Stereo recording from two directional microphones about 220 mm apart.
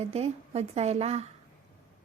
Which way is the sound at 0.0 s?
30° right (ahead or behind).